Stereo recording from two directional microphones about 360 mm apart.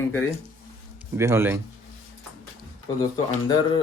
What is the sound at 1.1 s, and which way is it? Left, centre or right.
Speech, centre.